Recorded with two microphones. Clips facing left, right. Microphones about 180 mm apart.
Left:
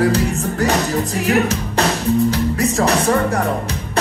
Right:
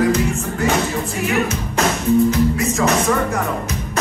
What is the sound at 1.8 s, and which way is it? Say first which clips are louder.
Music: right 1 dB; 35° left (ahead or behind).